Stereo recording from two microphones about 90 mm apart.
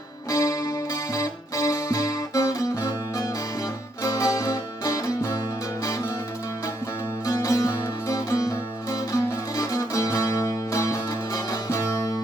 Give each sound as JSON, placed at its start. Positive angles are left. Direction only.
{"t": 0.3, "sound": "music", "side_deg": 40}
{"t": 7.3, "sound": "music", "side_deg": 40}